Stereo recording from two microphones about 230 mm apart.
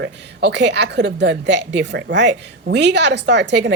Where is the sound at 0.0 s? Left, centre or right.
Right.